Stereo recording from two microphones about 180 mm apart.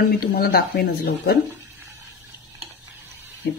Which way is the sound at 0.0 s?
55° left (ahead or behind).